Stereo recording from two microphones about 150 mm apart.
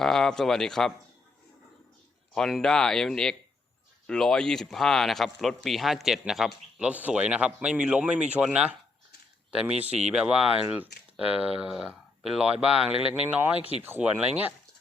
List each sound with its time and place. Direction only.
0.0 s speech: 5° left (ahead or behind)
2.3 s speech: 5° left (ahead or behind)
9.7 s speech: 45° right (ahead or behind)
10.1 s speech: 5° right (ahead or behind)